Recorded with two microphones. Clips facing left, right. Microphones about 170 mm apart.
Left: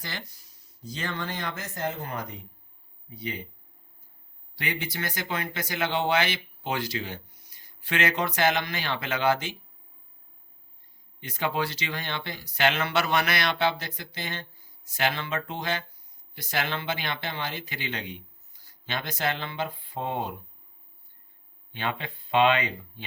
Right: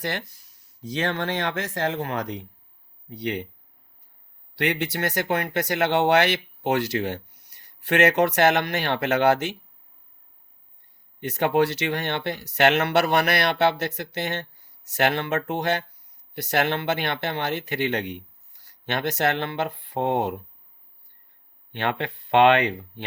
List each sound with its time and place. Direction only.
0.0 s speech: 70° right (ahead or behind)
0.8 s speech: 85° right
3.1 s speech: 75° right (ahead or behind)
4.5 s speech: 70° right (ahead or behind)
11.2 s speech: 65° right (ahead or behind)
21.7 s speech: 75° right (ahead or behind)